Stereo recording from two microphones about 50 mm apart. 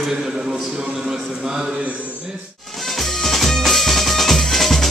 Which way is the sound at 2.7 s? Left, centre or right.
Centre.